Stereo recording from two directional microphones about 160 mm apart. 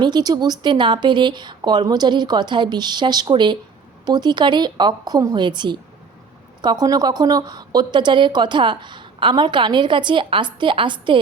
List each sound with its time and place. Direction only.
0.0 s a woman's voice: 25° right (ahead or behind)